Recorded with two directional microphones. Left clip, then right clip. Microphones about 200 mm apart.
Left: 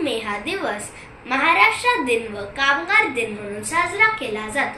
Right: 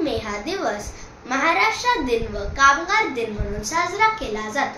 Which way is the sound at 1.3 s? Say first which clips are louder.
Left 3 dB; 15° right (ahead or behind).